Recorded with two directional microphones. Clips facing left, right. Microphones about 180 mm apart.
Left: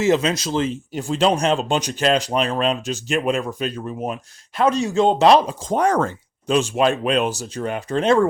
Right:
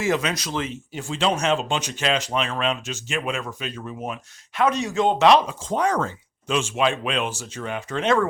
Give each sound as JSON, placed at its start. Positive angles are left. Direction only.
{"t": 0.0, "sound": "speech", "side_deg": 25}
{"t": 6.5, "sound": "speech", "side_deg": 40}